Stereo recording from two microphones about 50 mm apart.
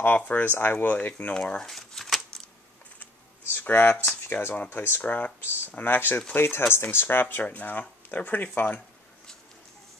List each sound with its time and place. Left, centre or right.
0.0 s speech: left
0.8 s speech: left
1.7 s shuffling cards: centre
3.6 s speech: left
5.0 s speech: left
7.4 s speech: left